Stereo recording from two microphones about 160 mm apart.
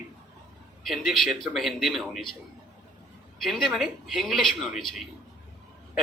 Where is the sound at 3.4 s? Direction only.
Centre (ahead or behind).